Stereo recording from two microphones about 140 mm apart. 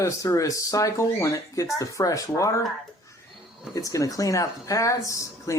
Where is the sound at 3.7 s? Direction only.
25° left (ahead or behind).